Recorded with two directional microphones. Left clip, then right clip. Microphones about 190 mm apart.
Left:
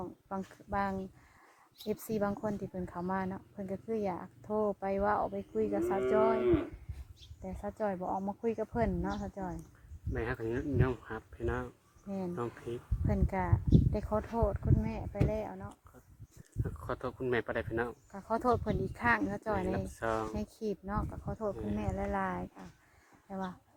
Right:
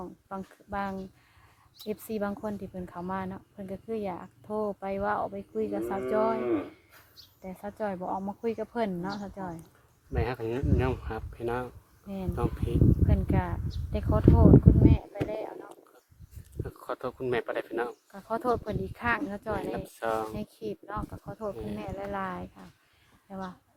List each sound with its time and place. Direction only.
0.0 s a woman's voice: 5° left (ahead or behind)
7.4 s a woman's voice: centre (ahead or behind)
10.1 s speech: 25° right (ahead or behind)
12.0 s a woman's voice: 5° left (ahead or behind)
16.6 s speech: 25° right (ahead or behind)
18.1 s speech: 5° left (ahead or behind)
19.7 s speech: 25° right (ahead or behind)
20.3 s speech: 15° left (ahead or behind)